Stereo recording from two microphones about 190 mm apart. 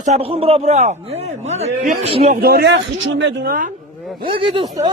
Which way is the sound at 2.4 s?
55° right (ahead or behind).